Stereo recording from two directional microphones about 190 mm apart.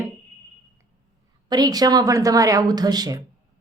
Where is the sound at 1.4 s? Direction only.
20° right (ahead or behind).